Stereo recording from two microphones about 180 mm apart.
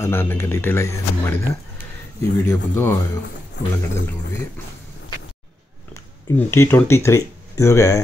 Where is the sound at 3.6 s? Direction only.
75° left (ahead or behind).